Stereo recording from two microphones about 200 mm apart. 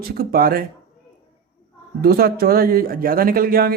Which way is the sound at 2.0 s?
50° right (ahead or behind).